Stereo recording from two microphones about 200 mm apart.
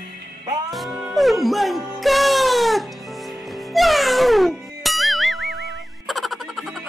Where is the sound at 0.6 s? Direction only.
Centre (ahead or behind).